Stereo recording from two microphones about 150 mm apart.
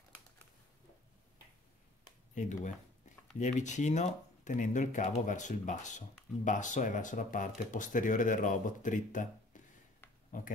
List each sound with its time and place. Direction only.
2.3 s speech: 55° left (ahead or behind)